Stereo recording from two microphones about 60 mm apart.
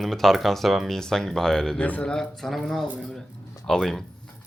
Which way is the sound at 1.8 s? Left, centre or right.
Left.